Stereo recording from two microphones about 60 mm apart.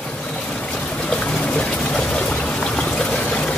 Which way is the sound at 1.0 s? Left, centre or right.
Centre.